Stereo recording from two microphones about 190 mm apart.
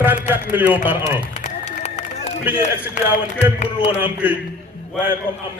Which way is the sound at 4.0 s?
10° right (ahead or behind).